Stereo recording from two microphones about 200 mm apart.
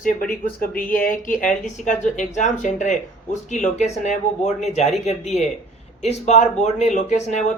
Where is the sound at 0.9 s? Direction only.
45° left (ahead or behind).